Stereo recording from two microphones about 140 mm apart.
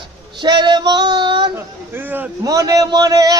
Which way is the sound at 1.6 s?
15° right (ahead or behind).